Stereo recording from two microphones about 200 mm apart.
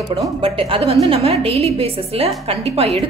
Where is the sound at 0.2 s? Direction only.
25° right (ahead or behind).